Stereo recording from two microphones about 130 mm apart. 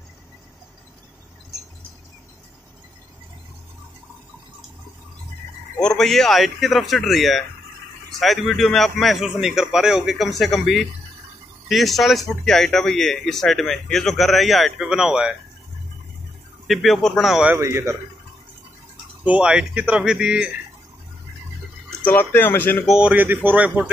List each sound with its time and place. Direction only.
5.8 s speech: 5° left (ahead or behind)
16.6 s speech: centre (ahead or behind)
17.6 s a man's voice: 20° right (ahead or behind)
19.2 s speech: 10° right (ahead or behind)
22.0 s speech: 15° left (ahead or behind)
22.8 s speech: 10° right (ahead or behind)